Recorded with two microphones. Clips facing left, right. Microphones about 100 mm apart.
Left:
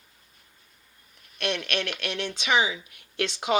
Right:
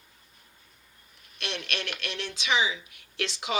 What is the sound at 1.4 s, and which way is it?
Speech, 50° left (ahead or behind).